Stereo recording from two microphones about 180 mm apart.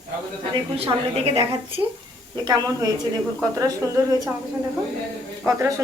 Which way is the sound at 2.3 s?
20° right (ahead or behind).